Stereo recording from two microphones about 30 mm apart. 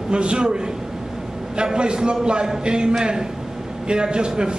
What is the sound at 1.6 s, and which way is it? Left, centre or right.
A man's voice, right.